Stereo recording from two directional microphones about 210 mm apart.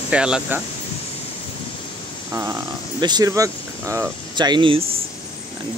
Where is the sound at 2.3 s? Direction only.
15° right (ahead or behind).